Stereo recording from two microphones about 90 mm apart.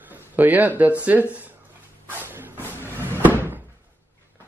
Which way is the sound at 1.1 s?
20° right (ahead or behind).